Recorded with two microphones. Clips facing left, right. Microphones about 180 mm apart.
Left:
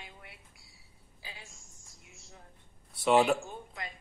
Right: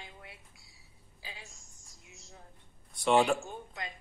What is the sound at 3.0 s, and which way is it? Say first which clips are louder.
Speech: left 1 dB; 5° left (ahead or behind).